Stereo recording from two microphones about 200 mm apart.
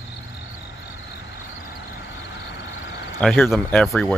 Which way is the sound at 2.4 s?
65° left (ahead or behind).